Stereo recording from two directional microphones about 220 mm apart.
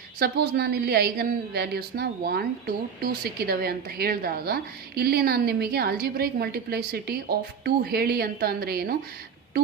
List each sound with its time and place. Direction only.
0.2 s a woman's voice: 45° right (ahead or behind)